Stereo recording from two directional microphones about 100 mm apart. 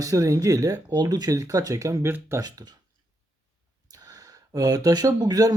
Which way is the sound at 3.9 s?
40° right (ahead or behind).